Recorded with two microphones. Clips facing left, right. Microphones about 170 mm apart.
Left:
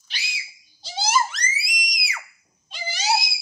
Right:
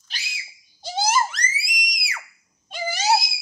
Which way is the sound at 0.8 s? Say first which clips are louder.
Right 4 dB; 55° right (ahead or behind).